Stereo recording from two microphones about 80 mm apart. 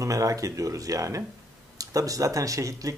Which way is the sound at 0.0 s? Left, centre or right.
Right.